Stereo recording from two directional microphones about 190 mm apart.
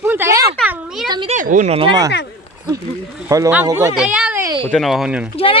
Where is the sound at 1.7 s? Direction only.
20° right (ahead or behind).